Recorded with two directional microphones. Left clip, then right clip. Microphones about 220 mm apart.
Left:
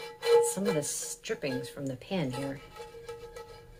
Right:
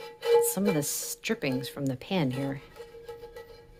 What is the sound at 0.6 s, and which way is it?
Speech, 45° right (ahead or behind).